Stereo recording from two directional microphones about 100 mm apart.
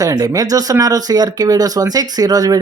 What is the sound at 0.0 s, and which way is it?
Speech, 35° right (ahead or behind).